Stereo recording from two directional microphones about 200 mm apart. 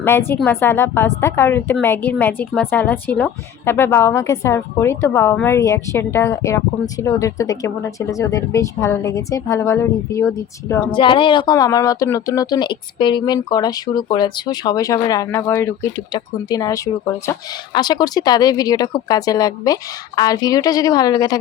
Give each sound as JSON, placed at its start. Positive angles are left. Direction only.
{"t": 0.0, "sound": "speech", "side_deg": 10}